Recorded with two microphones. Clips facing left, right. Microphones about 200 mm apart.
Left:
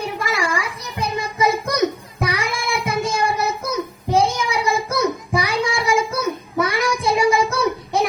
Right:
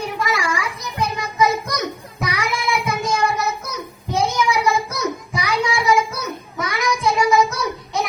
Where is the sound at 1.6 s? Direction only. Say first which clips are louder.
Left 6 dB; 30° left (ahead or behind).